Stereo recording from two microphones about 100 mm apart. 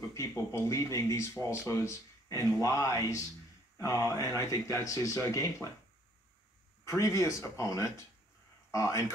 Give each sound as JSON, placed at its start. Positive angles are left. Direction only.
{"t": 0.1, "sound": "speech", "side_deg": 30}
{"t": 6.8, "sound": "speech", "side_deg": 30}